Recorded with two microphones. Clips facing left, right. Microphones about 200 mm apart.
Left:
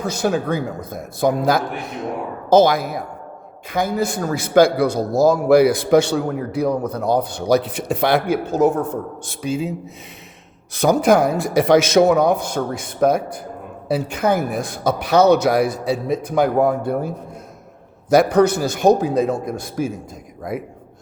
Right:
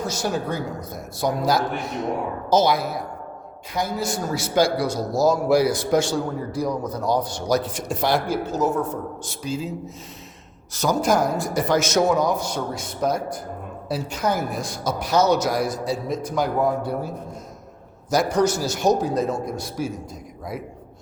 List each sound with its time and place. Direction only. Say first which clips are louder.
0.2 s a man's voice: left 8 dB; 55° left (ahead or behind)
10.8 s a man's voice: left 6 dB; 60° left (ahead or behind)
18.1 s a man's voice: left 6 dB; 60° left (ahead or behind)